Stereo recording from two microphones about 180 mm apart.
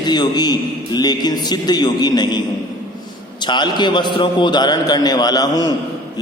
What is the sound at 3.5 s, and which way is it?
A man's voice, 25° left (ahead or behind).